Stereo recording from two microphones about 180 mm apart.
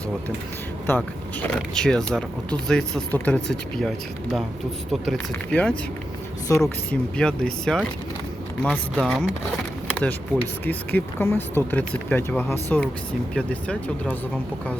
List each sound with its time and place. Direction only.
0.9 s speech: 10° left (ahead or behind)
7.2 s speech: 5° left (ahead or behind)